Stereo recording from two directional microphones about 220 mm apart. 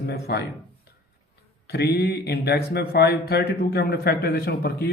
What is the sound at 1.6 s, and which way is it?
Speech, 45° left (ahead or behind).